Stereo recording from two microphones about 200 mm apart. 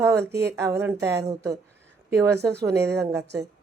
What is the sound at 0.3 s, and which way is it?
Speech, 55° right (ahead or behind).